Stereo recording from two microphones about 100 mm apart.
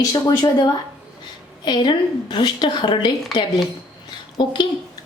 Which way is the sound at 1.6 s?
50° left (ahead or behind).